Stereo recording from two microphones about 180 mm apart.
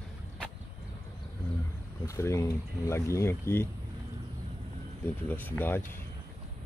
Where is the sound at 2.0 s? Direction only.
15° left (ahead or behind).